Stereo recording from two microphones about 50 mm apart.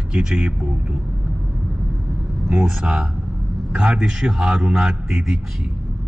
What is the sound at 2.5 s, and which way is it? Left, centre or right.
Speech, centre.